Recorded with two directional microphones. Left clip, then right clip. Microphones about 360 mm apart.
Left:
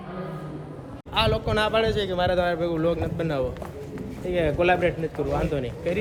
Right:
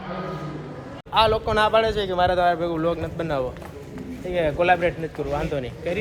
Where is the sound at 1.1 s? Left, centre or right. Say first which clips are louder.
Right 4 dB; centre.